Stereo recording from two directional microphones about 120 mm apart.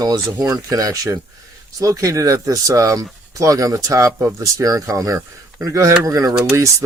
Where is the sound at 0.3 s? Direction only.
30° right (ahead or behind).